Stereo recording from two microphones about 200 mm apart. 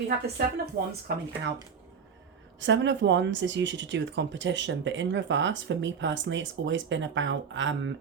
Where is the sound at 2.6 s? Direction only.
65° right (ahead or behind).